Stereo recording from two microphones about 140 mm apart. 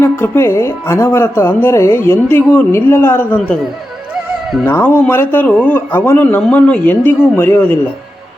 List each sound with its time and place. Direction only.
0.0 s speech: 15° left (ahead or behind)
4.6 s speech: 15° left (ahead or behind)